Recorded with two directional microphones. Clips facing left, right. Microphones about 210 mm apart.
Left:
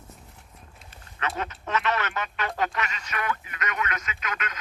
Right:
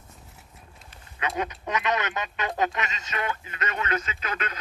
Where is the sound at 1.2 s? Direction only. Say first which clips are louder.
Right 2 dB; 15° right (ahead or behind).